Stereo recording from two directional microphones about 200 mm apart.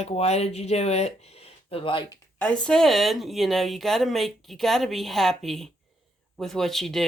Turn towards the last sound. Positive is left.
turn(degrees=0)  # may be behind; listen again after turning